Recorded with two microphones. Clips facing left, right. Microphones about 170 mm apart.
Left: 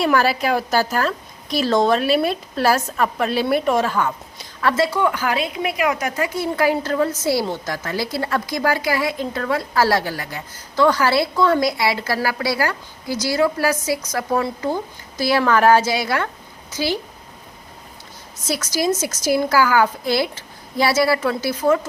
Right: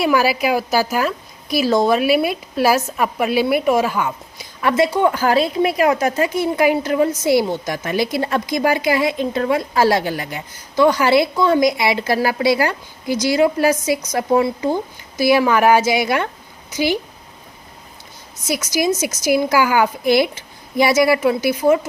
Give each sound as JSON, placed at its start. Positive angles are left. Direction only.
{"t": 0.0, "sound": "a woman's voice", "side_deg": -10}
{"t": 18.4, "sound": "a woman's voice", "side_deg": -10}